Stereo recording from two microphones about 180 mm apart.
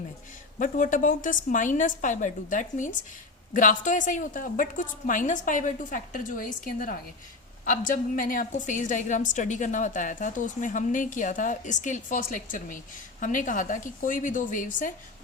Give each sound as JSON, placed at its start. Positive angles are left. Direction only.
{"t": 0.6, "sound": "a woman's voice", "side_deg": 45}